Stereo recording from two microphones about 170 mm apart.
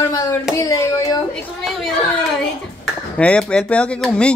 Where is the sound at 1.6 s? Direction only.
Centre (ahead or behind).